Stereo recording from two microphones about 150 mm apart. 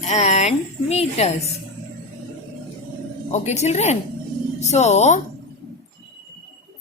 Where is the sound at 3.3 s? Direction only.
50° left (ahead or behind).